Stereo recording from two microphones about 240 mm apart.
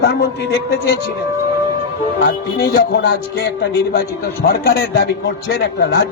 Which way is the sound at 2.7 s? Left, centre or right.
Left.